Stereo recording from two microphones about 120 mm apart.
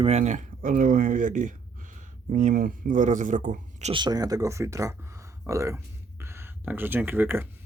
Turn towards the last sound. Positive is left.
turn(degrees=-15)  # may be behind; listen again after turning